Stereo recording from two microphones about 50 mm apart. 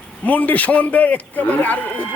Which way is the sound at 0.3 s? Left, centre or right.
Left.